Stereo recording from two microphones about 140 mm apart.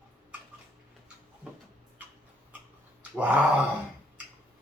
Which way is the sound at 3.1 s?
10° right (ahead or behind).